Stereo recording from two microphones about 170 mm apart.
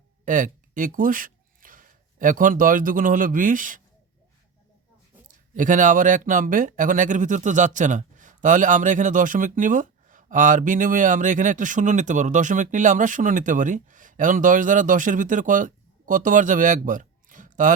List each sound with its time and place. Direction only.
0.3 s speech: 50° right (ahead or behind)
5.5 s speech: 50° right (ahead or behind)